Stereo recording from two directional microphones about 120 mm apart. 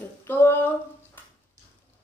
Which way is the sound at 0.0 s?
15° left (ahead or behind).